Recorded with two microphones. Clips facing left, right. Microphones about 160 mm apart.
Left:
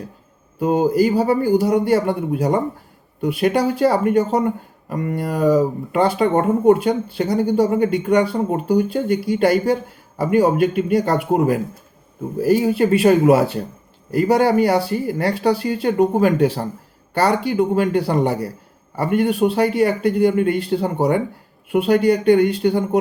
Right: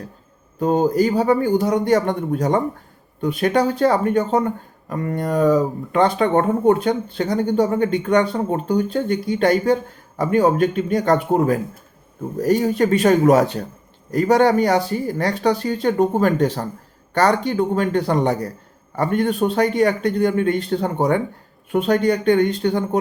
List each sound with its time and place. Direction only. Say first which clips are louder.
0.6 s speech: left 1 dB; 10° left (ahead or behind)